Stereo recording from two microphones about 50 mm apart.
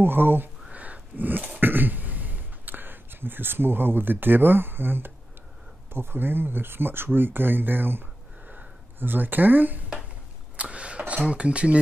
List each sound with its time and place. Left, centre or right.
0.0 s speech: right
0.7 s throat clearing: right
5.9 s speech: right
8.5 s a sound: right
10.5 s vehicle: right
11.2 s speech: right